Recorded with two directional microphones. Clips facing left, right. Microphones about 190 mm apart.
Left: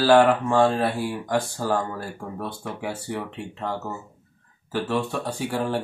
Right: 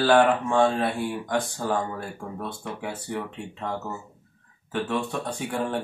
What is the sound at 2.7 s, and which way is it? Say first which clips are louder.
Speech: left 2 dB; 10° left (ahead or behind).